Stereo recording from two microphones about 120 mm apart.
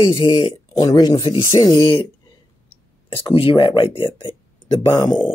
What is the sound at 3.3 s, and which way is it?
Speech, 50° left (ahead or behind).